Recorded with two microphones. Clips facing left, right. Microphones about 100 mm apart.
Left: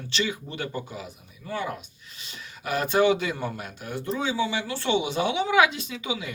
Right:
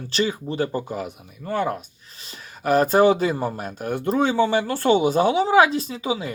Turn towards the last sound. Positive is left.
turn(degrees=-35)  # may be behind; listen again after turning